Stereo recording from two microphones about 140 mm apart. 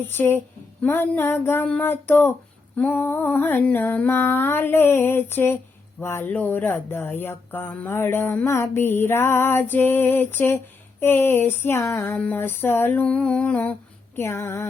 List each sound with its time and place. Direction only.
0.1 s speech: 15° left (ahead or behind)